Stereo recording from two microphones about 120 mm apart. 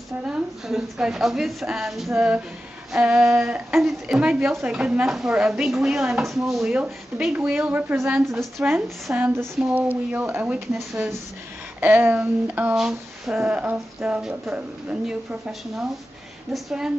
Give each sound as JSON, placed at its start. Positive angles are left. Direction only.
{"t": 0.2, "sound": "a woman's voice", "side_deg": -5}
{"t": 4.5, "sound": "speech", "side_deg": -20}
{"t": 4.7, "sound": "speech", "side_deg": -10}
{"t": 8.3, "sound": "speech", "side_deg": 0}
{"t": 9.1, "sound": "a woman's voice", "side_deg": -20}
{"t": 11.8, "sound": "a woman's voice", "side_deg": -15}